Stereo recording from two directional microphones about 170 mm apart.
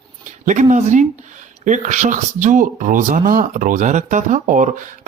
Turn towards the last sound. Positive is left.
turn(degrees=-50)  # may be behind; listen again after turning